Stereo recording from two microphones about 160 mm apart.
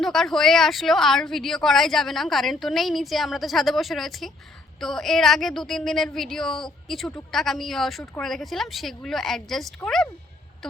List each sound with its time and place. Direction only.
0.0 s speech: centre (ahead or behind)